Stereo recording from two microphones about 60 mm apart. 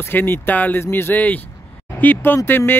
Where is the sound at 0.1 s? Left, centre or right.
Left.